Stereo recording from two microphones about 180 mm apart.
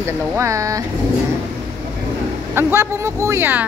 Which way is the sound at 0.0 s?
15° right (ahead or behind).